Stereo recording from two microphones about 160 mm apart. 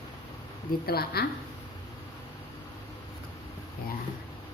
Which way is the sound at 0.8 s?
75° left (ahead or behind).